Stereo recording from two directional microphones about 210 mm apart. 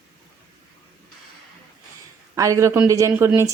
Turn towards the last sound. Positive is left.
turn(degrees=-10)  # may be behind; listen again after turning